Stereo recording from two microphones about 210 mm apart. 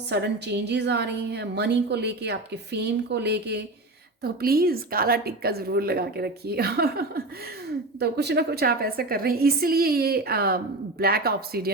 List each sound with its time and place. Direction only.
0.1 s a woman's voice: 55° right (ahead or behind)